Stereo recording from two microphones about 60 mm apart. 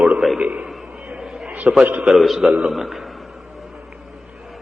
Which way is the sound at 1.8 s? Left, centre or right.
Right.